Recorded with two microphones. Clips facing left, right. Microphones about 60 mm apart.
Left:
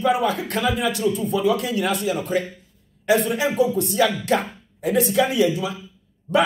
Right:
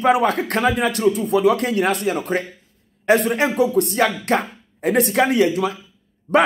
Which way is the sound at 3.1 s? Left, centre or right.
Right.